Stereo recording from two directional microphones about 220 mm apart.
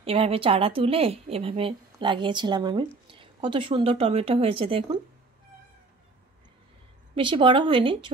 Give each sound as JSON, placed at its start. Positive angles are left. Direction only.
{"t": 0.0, "sound": "a woman's voice", "side_deg": -25}
{"t": 7.2, "sound": "a woman's voice", "side_deg": -20}